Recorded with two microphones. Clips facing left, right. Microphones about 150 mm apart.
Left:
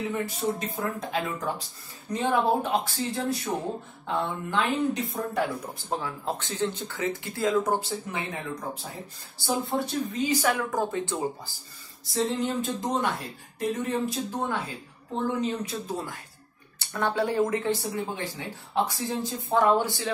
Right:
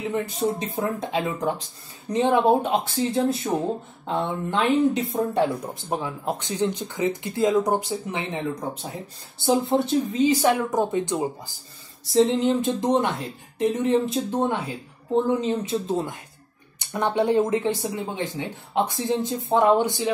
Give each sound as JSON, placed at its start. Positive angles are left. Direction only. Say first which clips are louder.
{"t": 0.0, "sound": "speech", "louder": "right 4 dB", "side_deg": -20}